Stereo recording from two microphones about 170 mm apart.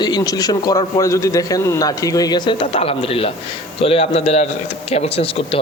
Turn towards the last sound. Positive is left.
turn(degrees=35)  # may be behind; listen again after turning